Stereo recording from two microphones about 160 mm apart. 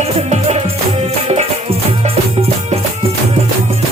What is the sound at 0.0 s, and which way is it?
Music, 40° right (ahead or behind).